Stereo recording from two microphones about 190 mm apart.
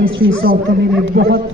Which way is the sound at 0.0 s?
55° right (ahead or behind).